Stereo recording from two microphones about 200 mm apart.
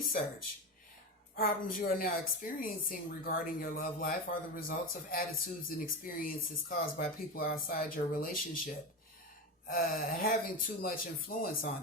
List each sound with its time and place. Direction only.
1.4 s a woman's voice: 45° left (ahead or behind)